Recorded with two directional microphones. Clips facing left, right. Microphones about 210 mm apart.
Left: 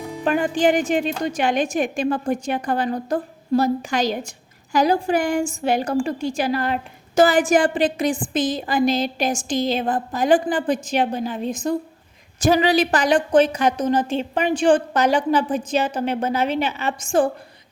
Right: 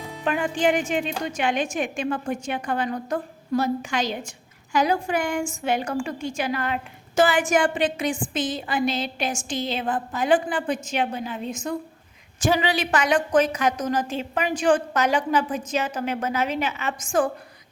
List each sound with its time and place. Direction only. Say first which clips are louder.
0.3 s a woman's voice: left 4 dB; 40° left (ahead or behind)